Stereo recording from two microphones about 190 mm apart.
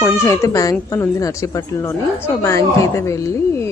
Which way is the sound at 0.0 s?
15° left (ahead or behind).